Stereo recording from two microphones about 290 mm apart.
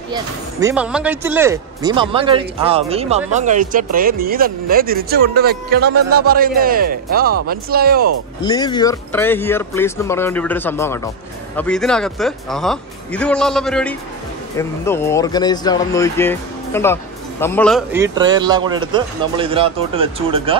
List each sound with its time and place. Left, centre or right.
0.1 s speech: centre; by 8.1 s right
8.5 s speech: centre
17.9 s speech: centre